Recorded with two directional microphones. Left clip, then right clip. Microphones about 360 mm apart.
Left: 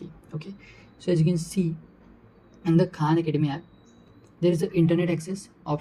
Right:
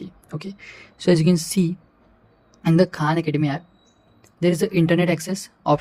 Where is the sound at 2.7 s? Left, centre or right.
Right.